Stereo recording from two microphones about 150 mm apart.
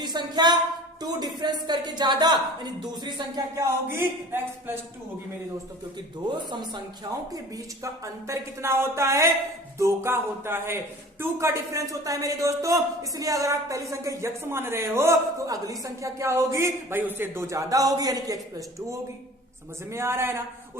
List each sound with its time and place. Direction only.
0.0 s a sound: 30° right (ahead or behind)
1.0 s a man's voice: 30° right (ahead or behind)
6.5 s speech: 30° right (ahead or behind)
8.0 s a man's voice: 20° right (ahead or behind)
19.9 s speech: 15° right (ahead or behind)